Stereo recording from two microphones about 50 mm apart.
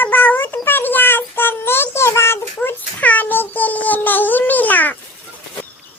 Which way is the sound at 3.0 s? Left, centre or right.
Left.